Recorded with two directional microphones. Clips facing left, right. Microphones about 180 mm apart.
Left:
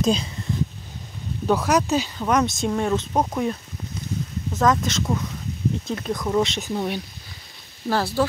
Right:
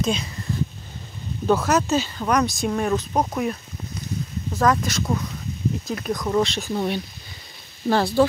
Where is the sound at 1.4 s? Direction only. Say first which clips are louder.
Right 1 dB; 15° left (ahead or behind).